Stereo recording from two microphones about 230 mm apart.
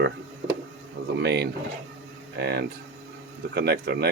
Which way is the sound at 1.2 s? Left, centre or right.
Right.